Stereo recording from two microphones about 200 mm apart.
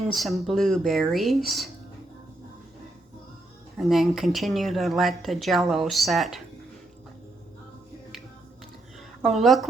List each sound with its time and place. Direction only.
0.1 s speech: centre (ahead or behind)
3.8 s speech: centre (ahead or behind)
9.2 s speech: centre (ahead or behind)